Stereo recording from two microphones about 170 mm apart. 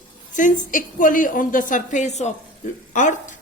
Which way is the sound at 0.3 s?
50° left (ahead or behind).